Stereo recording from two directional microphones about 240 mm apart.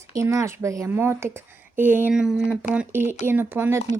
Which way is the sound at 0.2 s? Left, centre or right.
Centre.